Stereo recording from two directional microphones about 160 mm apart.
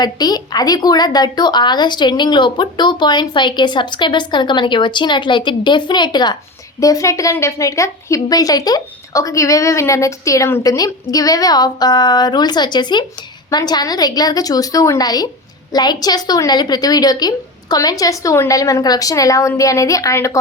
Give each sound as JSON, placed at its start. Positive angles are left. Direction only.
{"t": 0.0, "sound": "a woman's voice", "side_deg": 25}